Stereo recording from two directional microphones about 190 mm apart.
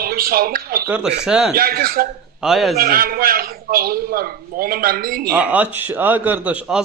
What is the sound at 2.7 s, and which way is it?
A man's voice, 50° right (ahead or behind).